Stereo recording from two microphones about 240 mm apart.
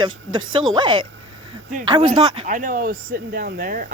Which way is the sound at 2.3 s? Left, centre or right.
Right.